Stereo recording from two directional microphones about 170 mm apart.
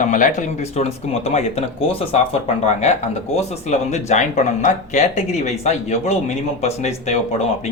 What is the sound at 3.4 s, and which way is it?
Speech, 40° left (ahead or behind).